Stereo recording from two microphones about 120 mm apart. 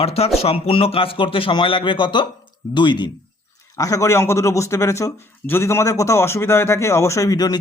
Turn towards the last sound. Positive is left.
turn(degrees=30)  # may be behind; listen again after turning